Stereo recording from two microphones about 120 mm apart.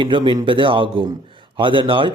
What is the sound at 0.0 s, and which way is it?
A man's voice, 40° right (ahead or behind).